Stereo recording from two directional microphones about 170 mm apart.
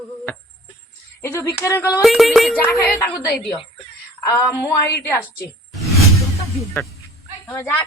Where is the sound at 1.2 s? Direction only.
15° left (ahead or behind).